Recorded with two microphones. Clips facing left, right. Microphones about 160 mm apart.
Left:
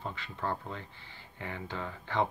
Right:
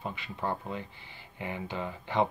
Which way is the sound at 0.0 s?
15° right (ahead or behind).